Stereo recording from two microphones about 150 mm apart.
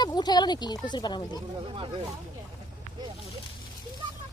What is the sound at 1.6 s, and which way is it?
Speech, 35° right (ahead or behind).